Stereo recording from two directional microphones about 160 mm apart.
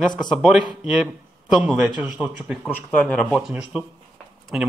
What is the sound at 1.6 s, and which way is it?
Speech, 10° right (ahead or behind).